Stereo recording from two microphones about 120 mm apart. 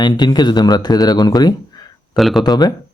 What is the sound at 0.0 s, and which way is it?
Speech, 35° left (ahead or behind).